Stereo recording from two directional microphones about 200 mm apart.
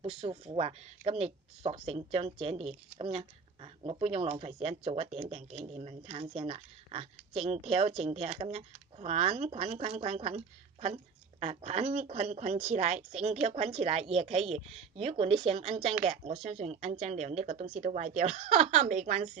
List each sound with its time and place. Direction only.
0.0 s speech: 30° right (ahead or behind)